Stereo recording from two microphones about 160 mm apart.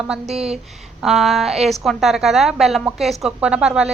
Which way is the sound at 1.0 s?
Centre (ahead or behind).